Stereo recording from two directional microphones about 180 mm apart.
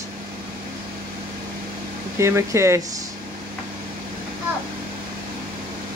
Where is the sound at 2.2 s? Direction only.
15° right (ahead or behind).